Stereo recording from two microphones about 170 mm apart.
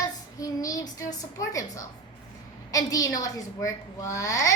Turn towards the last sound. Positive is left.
turn(degrees=20)  # may be behind; listen again after turning